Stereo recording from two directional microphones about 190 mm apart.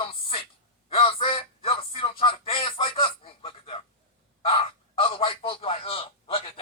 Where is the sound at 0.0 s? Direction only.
30° left (ahead or behind).